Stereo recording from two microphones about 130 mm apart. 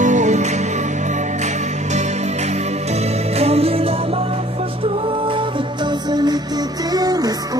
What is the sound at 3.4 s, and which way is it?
Music, 50° right (ahead or behind).